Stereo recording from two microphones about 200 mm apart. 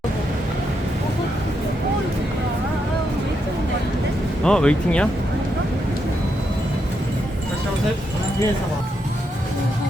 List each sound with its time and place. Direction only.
4.4 s speech: 5° left (ahead or behind)